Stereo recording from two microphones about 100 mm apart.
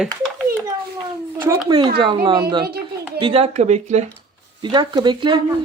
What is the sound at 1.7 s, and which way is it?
Speech, 50° right (ahead or behind).